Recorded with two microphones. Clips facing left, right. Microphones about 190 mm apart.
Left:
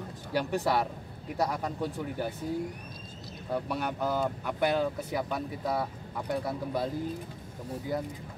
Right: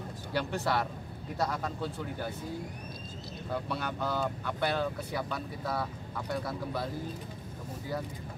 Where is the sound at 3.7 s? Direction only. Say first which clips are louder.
Left 3 dB; 15° left (ahead or behind).